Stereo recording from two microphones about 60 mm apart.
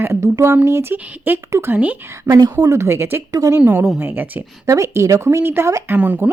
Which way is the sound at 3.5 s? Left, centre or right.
Right.